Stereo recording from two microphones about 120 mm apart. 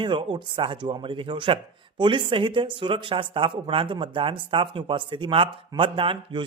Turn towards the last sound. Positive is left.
turn(degrees=-45)  # may be behind; listen again after turning